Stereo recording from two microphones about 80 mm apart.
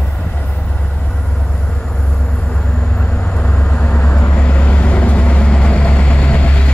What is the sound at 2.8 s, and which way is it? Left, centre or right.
Vehicle, centre.